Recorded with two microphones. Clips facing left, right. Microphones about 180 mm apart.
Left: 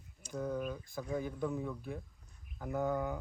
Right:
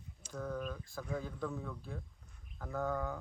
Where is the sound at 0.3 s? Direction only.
15° left (ahead or behind).